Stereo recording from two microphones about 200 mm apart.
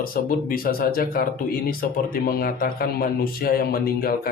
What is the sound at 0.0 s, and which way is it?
A man's voice, 45° left (ahead or behind).